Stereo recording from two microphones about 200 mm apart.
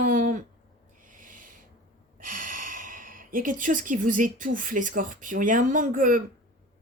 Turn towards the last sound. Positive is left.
turn(degrees=-45)  # may be behind; listen again after turning